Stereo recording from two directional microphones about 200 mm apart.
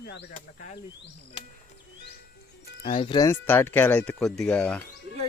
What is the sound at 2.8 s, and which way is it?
Speech, 25° left (ahead or behind).